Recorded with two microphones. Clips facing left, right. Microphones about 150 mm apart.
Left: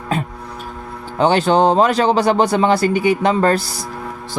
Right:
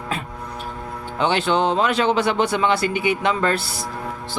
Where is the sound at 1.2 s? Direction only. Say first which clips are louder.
Left 6 dB; 40° left (ahead or behind).